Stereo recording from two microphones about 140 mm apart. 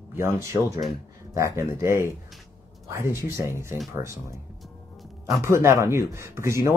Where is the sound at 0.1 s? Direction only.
20° right (ahead or behind).